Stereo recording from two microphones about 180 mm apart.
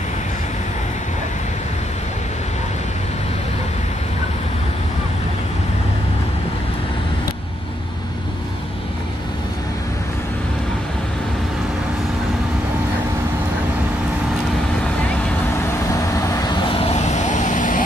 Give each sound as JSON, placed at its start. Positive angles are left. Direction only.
{"t": 16.4, "sound": "vehicle", "side_deg": 25}